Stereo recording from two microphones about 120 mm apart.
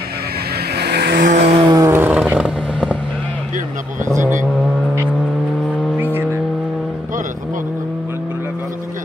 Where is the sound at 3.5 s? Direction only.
90° right.